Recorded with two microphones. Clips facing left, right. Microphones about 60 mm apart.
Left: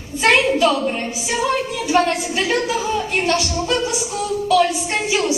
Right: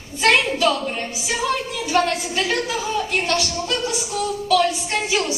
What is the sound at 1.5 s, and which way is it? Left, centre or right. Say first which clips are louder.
A woman's voice: left 4 dB; centre.